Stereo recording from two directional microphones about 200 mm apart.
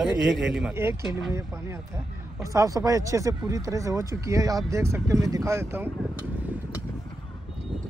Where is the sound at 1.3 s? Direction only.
15° right (ahead or behind).